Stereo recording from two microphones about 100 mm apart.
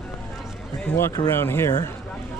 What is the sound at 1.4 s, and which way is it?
Speech, 25° left (ahead or behind).